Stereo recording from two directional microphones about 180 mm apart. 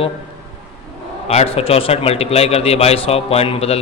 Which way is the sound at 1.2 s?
35° left (ahead or behind).